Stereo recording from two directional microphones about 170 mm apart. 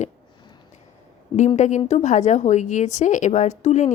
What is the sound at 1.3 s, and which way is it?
A woman's voice, 45° left (ahead or behind).